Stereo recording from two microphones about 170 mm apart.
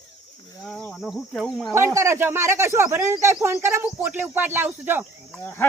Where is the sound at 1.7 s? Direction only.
15° right (ahead or behind).